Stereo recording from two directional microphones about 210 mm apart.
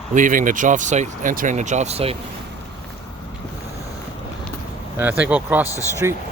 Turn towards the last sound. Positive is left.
turn(degrees=15)  # may be behind; listen again after turning